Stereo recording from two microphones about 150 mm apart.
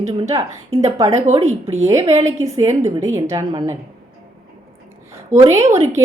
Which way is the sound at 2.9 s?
25° right (ahead or behind).